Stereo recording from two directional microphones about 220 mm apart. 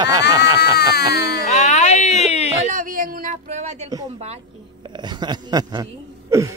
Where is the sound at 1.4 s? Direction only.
30° left (ahead or behind).